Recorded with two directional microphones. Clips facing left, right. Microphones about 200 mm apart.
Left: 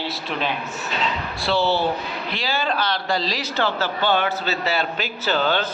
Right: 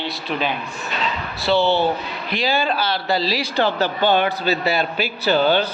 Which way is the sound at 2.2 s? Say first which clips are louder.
Right 5 dB; 15° right (ahead or behind).